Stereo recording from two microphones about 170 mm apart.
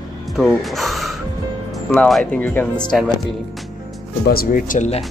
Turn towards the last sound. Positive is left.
turn(degrees=50)  # may be behind; listen again after turning